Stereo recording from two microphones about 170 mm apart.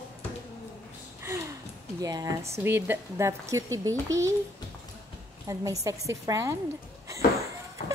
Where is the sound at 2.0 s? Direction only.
20° right (ahead or behind).